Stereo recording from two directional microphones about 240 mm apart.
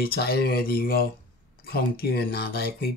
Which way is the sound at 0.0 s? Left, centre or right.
Left.